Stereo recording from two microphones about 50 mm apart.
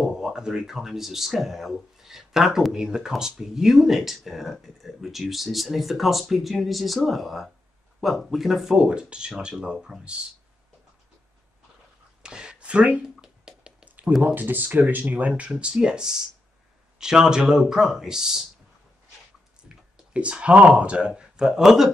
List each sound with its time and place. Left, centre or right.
0.0 s speech: centre
12.2 s a sound: centre
13.2 s music: centre
13.8 s a sound: right
14.2 s speech: right
15.6 s speech: centre
19.7 s speech: right
21.2 s speech: centre